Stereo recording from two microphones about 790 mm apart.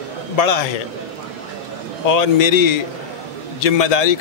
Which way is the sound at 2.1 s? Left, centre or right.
Left.